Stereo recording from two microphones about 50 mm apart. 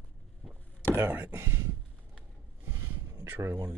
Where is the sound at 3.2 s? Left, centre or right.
Right.